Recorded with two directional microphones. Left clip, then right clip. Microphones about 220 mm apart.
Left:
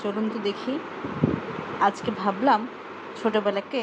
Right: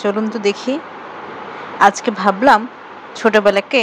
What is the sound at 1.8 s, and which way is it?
A woman's voice, 25° right (ahead or behind).